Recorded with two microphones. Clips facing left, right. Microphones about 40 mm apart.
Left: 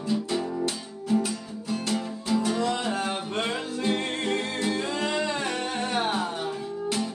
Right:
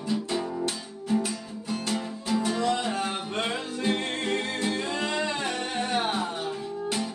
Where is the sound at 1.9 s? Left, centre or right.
Centre.